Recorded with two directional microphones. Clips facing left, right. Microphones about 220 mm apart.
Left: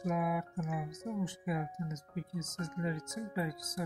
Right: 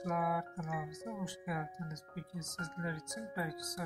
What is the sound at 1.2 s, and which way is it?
Speech, 20° left (ahead or behind).